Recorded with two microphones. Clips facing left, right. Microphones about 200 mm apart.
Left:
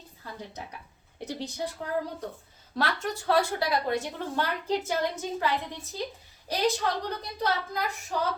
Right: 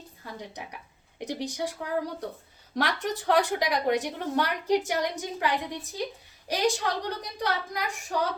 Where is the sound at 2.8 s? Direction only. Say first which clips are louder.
Right 1 dB; 15° right (ahead or behind).